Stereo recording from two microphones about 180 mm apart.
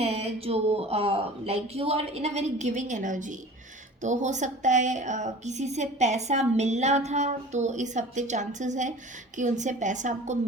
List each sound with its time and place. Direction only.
0.0 s a woman's voice: 35° right (ahead or behind)